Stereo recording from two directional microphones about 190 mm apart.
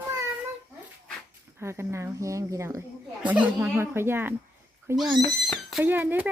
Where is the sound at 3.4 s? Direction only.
10° right (ahead or behind).